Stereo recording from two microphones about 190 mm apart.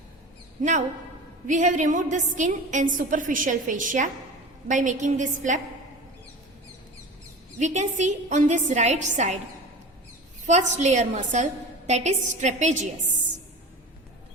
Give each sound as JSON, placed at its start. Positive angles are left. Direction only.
{"t": 0.6, "sound": "a woman's voice", "side_deg": -40}
{"t": 7.6, "sound": "a woman's voice", "side_deg": -40}
{"t": 10.4, "sound": "a woman's voice", "side_deg": -40}